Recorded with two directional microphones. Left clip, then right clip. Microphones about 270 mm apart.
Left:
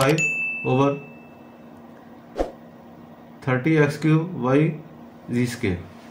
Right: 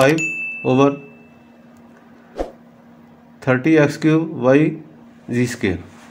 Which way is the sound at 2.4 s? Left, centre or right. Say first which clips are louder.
Even; centre.